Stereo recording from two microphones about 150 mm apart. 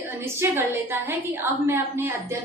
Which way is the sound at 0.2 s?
15° right (ahead or behind).